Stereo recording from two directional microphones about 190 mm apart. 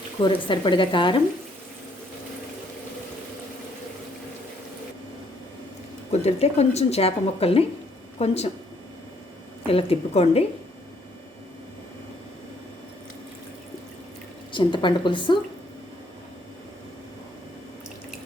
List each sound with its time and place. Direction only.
0.2 s speech: 25° left (ahead or behind)
6.1 s speech: 35° left (ahead or behind)
9.6 s speech: 30° left (ahead or behind)
14.5 s speech: 25° left (ahead or behind)